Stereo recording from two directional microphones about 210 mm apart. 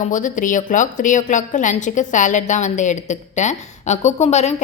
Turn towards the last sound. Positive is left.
turn(degrees=30)  # may be behind; listen again after turning